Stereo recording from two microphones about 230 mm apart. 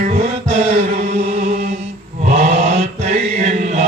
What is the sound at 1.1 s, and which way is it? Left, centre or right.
Chant, right.